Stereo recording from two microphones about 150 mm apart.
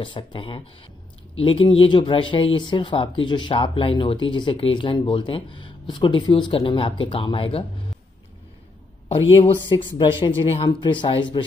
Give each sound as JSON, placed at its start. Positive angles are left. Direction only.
{"t": 0.0, "sound": "speech", "side_deg": 35}
{"t": 9.1, "sound": "speech", "side_deg": 40}